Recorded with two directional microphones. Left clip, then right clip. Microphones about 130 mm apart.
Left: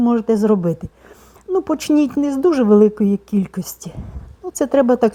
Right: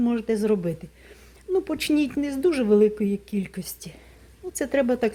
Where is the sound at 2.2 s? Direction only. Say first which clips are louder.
Left 7 dB; 35° left (ahead or behind).